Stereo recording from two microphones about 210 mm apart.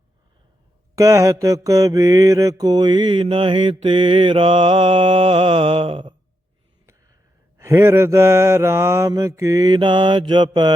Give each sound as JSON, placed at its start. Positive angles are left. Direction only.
{"t": 0.9, "sound": "mantra", "side_deg": -15}
{"t": 7.6, "sound": "mantra", "side_deg": -15}